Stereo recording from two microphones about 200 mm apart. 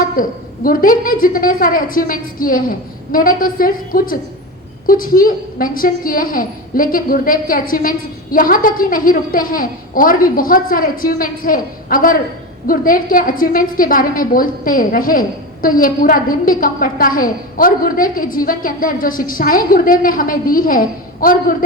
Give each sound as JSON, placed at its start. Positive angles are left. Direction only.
{"t": 0.2, "sound": "a woman's voice", "side_deg": 45}